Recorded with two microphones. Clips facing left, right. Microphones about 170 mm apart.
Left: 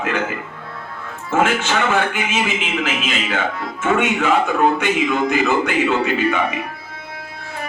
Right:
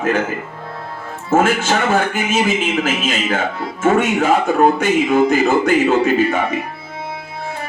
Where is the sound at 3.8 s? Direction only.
40° right (ahead or behind).